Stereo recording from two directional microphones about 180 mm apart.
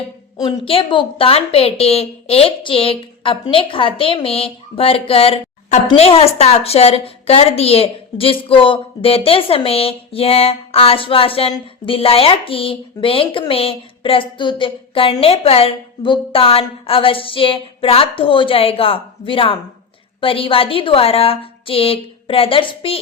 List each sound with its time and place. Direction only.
0.3 s speech: 25° left (ahead or behind)